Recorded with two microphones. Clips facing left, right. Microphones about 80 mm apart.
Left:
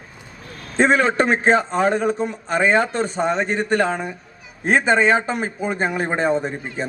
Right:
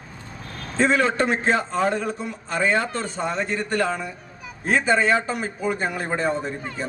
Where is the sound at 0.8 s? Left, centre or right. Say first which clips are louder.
Left 3 dB; left.